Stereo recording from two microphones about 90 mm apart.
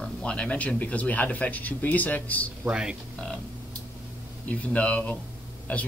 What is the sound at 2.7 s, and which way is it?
Speech, 10° right (ahead or behind).